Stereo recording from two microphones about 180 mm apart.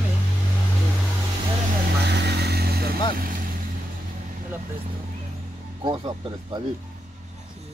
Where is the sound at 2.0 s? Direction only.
70° right (ahead or behind).